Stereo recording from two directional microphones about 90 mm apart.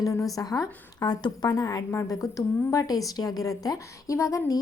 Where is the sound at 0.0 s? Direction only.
40° left (ahead or behind).